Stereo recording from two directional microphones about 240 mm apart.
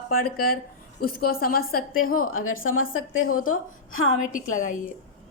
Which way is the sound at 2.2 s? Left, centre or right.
Left.